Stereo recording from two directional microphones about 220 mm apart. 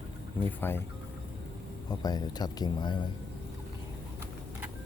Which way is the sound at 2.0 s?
20° left (ahead or behind).